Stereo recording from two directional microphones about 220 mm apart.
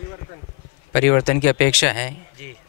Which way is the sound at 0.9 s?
20° left (ahead or behind).